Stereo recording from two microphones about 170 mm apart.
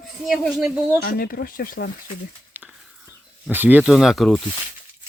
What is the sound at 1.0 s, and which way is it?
Speech, 60° left (ahead or behind).